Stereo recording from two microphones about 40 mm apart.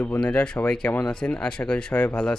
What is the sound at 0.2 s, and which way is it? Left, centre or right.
Speech, left.